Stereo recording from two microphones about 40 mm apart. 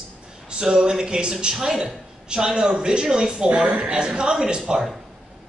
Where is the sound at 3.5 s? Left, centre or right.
Right.